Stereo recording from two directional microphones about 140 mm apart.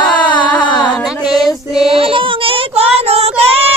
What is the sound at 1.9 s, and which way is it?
Child singing, 40° right (ahead or behind).